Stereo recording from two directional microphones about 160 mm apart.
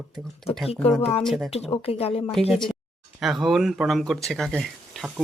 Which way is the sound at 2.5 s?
Centre (ahead or behind).